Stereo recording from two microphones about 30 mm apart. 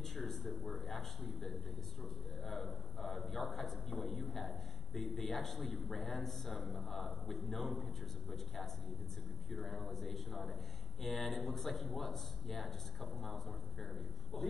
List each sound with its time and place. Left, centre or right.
0.0 s a man's voice: centre